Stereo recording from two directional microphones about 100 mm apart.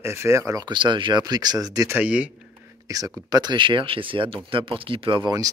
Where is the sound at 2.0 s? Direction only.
15° right (ahead or behind).